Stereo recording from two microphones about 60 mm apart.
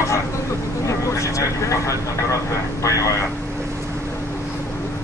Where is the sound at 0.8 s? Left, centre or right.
Left.